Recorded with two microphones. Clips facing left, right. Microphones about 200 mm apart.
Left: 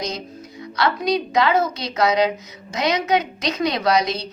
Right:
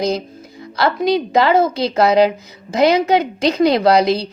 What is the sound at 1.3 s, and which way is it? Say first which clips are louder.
A woman's voice: right 5 dB; 30° right (ahead or behind).